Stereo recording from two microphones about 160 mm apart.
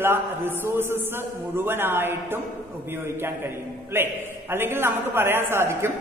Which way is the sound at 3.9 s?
15° right (ahead or behind).